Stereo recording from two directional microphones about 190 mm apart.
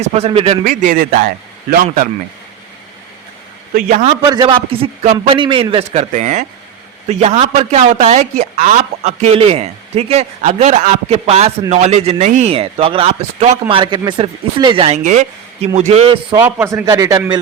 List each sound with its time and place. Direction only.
0.0 s speech: 35° right (ahead or behind)
0.6 s speech: 45° right (ahead or behind)
4.0 s a man's voice: 25° right (ahead or behind)
16.3 s a man's voice: 15° right (ahead or behind)